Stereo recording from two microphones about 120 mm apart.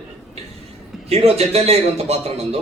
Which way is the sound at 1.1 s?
60° right (ahead or behind).